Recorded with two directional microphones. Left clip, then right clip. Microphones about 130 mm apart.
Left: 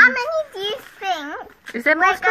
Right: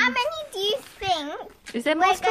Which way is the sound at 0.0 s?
80° right.